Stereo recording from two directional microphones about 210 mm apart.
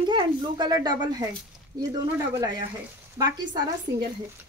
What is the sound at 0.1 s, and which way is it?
Speech, 20° right (ahead or behind).